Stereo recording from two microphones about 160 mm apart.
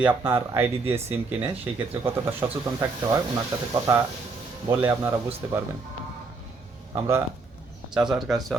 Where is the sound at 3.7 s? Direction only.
20° right (ahead or behind).